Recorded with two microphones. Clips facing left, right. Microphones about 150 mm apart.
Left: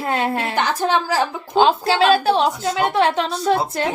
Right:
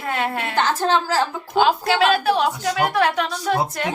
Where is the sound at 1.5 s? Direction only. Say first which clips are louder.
Left 2 dB; 30° left (ahead or behind).